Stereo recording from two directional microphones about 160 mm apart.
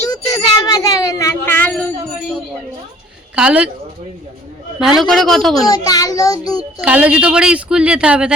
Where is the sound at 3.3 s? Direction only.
10° right (ahead or behind).